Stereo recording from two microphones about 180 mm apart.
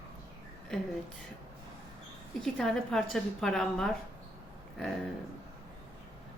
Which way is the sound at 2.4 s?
5° left (ahead or behind).